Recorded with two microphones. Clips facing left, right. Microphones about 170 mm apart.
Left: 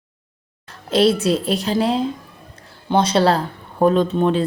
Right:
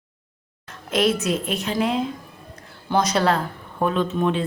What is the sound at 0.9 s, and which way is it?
A woman's voice, 30° left (ahead or behind).